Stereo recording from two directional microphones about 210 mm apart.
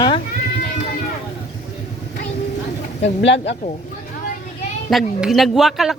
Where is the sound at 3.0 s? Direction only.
60° left (ahead or behind).